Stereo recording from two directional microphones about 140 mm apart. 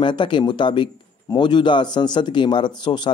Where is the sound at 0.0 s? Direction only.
35° left (ahead or behind).